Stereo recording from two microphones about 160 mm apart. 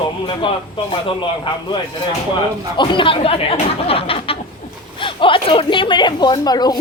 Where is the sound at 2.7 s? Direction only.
30° left (ahead or behind).